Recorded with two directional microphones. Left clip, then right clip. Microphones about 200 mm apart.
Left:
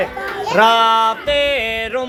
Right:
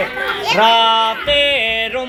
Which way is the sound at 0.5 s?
10° left (ahead or behind).